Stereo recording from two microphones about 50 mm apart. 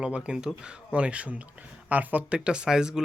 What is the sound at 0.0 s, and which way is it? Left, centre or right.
Speech, centre.